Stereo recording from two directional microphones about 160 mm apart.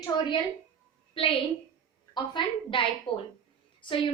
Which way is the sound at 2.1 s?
30° left (ahead or behind).